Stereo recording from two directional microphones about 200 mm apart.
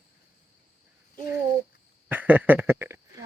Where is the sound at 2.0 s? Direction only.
10° right (ahead or behind).